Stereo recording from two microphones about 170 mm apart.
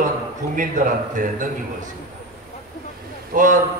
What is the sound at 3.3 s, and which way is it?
Speech, 50° right (ahead or behind).